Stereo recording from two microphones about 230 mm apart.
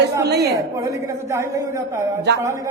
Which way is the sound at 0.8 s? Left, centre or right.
Centre.